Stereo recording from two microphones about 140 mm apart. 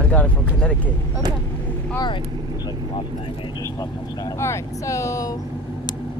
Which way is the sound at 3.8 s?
25° left (ahead or behind).